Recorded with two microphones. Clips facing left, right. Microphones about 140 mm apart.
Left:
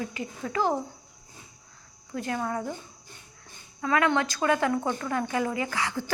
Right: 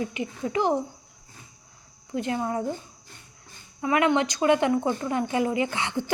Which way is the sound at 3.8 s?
20° right (ahead or behind).